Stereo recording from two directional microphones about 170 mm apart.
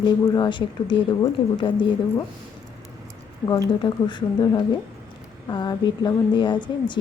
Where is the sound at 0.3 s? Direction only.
25° left (ahead or behind).